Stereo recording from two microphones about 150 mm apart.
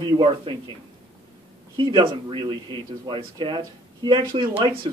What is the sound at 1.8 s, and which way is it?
A man's voice, 30° right (ahead or behind).